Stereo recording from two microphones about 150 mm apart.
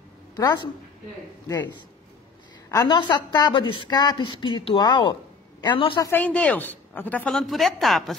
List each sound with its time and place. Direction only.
0.4 s a woman's voice: 30° left (ahead or behind)
2.7 s a woman's voice: 25° left (ahead or behind)
6.0 s speech: 10° left (ahead or behind)